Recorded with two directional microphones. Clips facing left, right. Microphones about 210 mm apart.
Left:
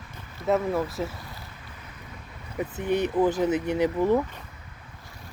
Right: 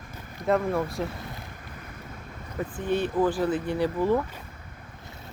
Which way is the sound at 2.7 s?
20° left (ahead or behind).